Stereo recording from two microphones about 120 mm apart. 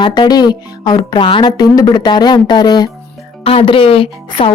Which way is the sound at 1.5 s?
30° left (ahead or behind).